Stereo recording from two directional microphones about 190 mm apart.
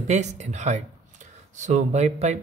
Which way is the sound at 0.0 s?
40° right (ahead or behind).